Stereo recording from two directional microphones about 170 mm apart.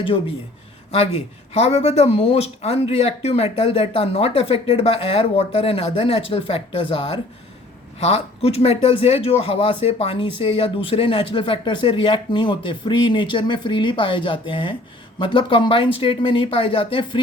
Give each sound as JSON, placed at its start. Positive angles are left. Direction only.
{"t": 1.5, "sound": "speech", "side_deg": 40}